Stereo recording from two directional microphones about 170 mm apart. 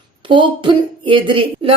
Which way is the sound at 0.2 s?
30° right (ahead or behind).